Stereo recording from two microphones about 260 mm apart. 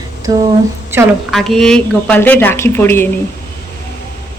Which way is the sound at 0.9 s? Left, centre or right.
Centre.